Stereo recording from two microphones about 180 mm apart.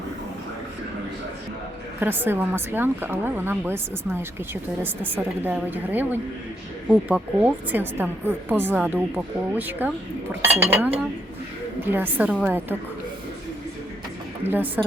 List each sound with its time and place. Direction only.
2.0 s a woman's voice: 10° right (ahead or behind)
11.8 s a woman's voice: 10° right (ahead or behind)
14.4 s a woman's voice: 10° right (ahead or behind)